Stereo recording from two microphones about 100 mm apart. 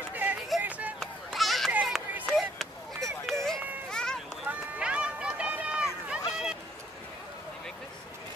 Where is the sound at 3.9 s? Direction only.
5° left (ahead or behind).